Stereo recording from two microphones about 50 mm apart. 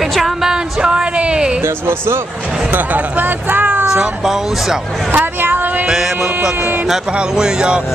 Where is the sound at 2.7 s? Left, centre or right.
Right.